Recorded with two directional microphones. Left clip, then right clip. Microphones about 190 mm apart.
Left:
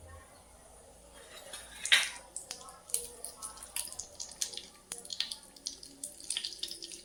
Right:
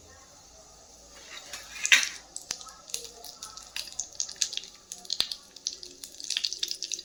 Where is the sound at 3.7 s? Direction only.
20° right (ahead or behind).